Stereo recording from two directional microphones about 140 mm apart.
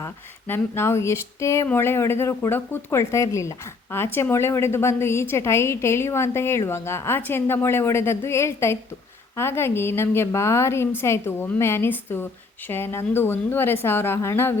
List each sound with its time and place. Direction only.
0.0 s a woman's voice: 15° left (ahead or behind)